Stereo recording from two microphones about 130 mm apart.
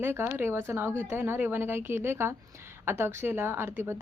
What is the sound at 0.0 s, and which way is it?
Speech, 20° right (ahead or behind).